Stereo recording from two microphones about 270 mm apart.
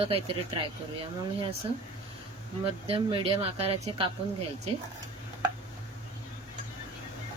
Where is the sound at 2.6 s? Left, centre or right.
Centre.